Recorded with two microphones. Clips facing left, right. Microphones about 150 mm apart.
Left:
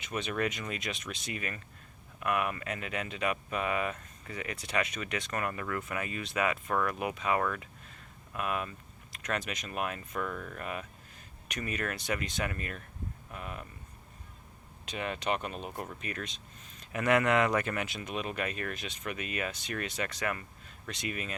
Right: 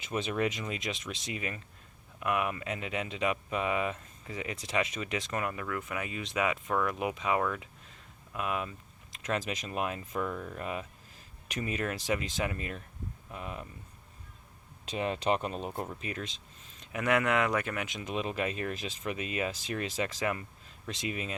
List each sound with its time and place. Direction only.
0.0 s speech: 25° right (ahead or behind)
5.5 s speech: 5° right (ahead or behind); by 13.7 s 20° right (ahead or behind)
14.8 s speech: 30° right (ahead or behind)
16.9 s speech: 10° right (ahead or behind)